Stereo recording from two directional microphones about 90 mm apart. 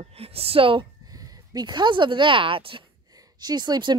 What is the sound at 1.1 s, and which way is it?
A woman's voice, 45° right (ahead or behind).